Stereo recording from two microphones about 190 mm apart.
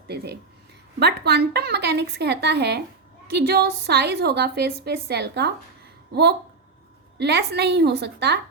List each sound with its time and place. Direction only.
0.1 s a woman's voice: 60° right (ahead or behind)
7.2 s a woman's voice: 60° right (ahead or behind)